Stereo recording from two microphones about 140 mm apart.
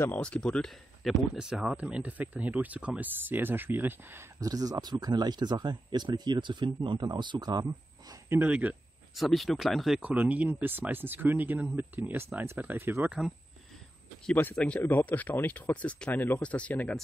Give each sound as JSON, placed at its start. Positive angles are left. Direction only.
{"t": 0.0, "sound": "speech", "side_deg": 10}
{"t": 4.4, "sound": "speech", "side_deg": -25}
{"t": 8.3, "sound": "speech", "side_deg": -10}
{"t": 14.2, "sound": "speech", "side_deg": 10}